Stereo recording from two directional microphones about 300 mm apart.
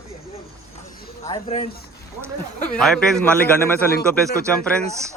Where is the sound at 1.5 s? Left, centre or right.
Left.